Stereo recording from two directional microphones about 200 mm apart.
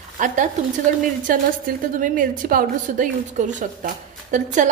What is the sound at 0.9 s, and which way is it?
A woman's voice, 40° right (ahead or behind).